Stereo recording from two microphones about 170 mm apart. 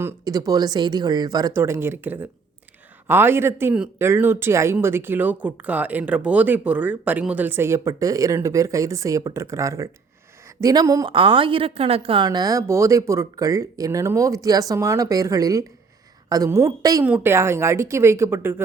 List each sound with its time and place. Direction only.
0.0 s a woman's voice: 15° right (ahead or behind)